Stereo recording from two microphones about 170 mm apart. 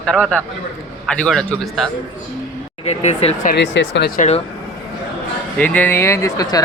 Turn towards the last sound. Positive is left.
turn(degrees=20)  # may be behind; listen again after turning